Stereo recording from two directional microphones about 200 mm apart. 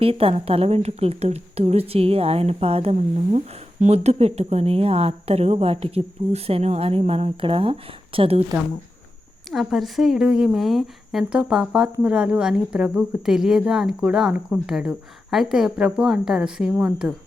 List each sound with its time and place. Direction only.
0.0 s a woman's voice: 30° right (ahead or behind)
9.5 s a woman's voice: centre (ahead or behind)